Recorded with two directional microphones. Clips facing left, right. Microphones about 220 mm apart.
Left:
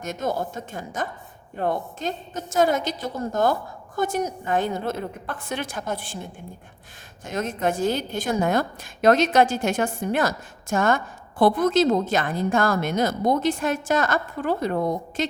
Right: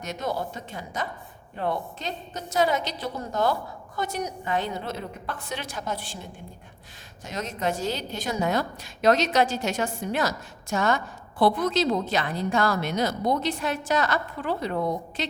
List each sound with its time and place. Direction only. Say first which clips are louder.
0.0 s a woman's voice: left 3 dB; 50° left (ahead or behind)
7.3 s a woman's voice: left 4 dB; 50° left (ahead or behind)